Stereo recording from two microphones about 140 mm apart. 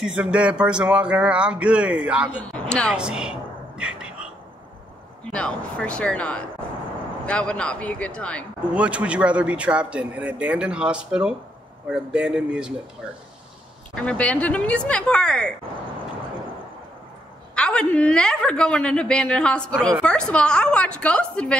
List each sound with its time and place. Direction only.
0.0 s a man's voice: 5° right (ahead or behind)
2.5 s a woman's voice: 5° left (ahead or behind)
2.9 s a sound: 5° right (ahead or behind)
5.3 s a woman's voice: 10° left (ahead or behind)
8.7 s a man's voice: 10° right (ahead or behind)
13.9 s a woman's voice: 10° left (ahead or behind)
17.6 s a woman's voice: 5° left (ahead or behind)